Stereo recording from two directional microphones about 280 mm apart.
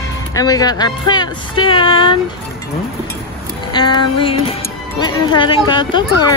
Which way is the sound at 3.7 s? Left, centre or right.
Centre.